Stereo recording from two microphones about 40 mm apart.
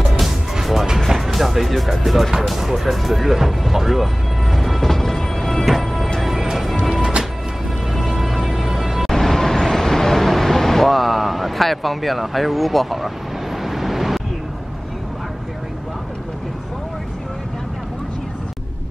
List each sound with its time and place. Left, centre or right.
0.2 s music: centre
6.8 s music: centre
7.9 s music: centre
9.1 s vehicle: centre
13.7 s waves: centre